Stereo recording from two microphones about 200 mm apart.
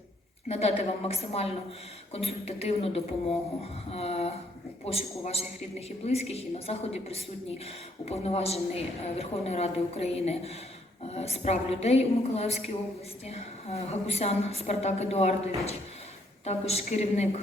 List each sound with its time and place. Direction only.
0.4 s a woman's voice: 30° left (ahead or behind)